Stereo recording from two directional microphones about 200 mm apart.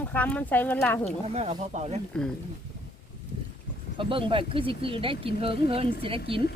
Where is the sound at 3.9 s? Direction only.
25° right (ahead or behind).